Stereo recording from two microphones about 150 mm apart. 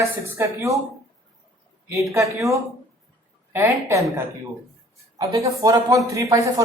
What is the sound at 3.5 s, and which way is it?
Speech, 20° right (ahead or behind).